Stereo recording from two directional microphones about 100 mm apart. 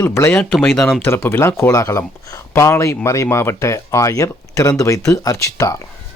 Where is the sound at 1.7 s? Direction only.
35° left (ahead or behind).